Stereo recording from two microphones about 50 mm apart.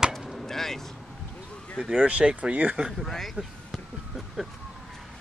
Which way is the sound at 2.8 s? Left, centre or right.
Centre.